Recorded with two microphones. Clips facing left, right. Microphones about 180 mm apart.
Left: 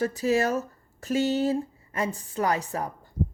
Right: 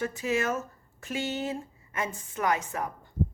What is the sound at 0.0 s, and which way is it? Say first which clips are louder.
Speech: left 5 dB; 35° left (ahead or behind).